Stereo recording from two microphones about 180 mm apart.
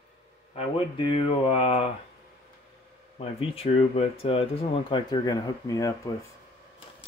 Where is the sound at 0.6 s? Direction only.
35° left (ahead or behind).